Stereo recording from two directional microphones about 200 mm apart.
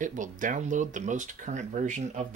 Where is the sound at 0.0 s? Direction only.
40° right (ahead or behind).